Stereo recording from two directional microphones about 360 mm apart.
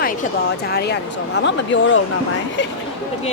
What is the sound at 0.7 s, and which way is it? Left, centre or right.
Speech, left.